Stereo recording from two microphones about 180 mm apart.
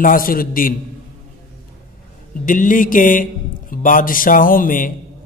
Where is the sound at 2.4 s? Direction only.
45° left (ahead or behind).